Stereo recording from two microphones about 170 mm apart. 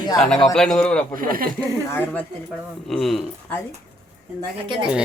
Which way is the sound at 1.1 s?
55° right (ahead or behind).